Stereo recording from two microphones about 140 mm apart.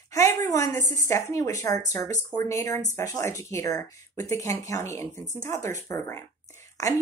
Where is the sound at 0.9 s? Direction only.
20° left (ahead or behind).